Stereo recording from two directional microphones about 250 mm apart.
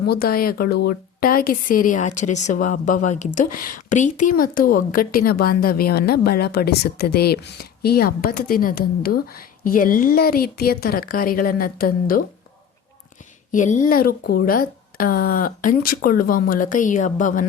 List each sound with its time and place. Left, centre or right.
0.1 s a woman's voice: left
13.5 s a woman's voice: left